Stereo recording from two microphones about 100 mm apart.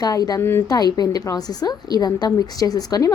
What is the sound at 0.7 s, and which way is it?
A woman's voice, 40° left (ahead or behind).